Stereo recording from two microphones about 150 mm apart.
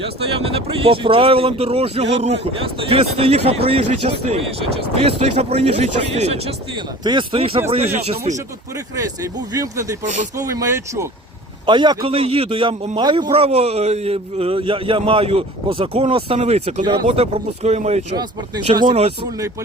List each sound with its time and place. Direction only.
0.0 s a man's voice: 40° right (ahead or behind)
7.0 s a man's voice: 30° right (ahead or behind)
9.0 s speech: 20° right (ahead or behind)
10.0 s speech: 55° right (ahead or behind)
10.3 s speech: 20° right (ahead or behind)
11.6 s a man's voice: 30° right (ahead or behind)
12.1 s a man's voice: 40° right (ahead or behind)